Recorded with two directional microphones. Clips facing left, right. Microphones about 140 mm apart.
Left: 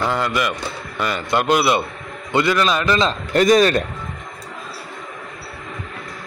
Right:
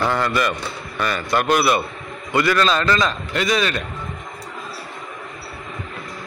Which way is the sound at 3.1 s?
40° left (ahead or behind).